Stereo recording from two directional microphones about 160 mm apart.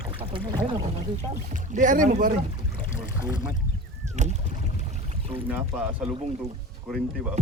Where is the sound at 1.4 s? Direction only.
50° right (ahead or behind).